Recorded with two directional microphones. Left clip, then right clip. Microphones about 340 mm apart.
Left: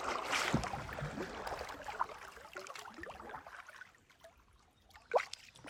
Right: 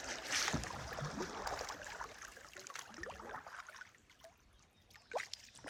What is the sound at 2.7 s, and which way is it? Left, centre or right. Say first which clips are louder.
Boat: even; right.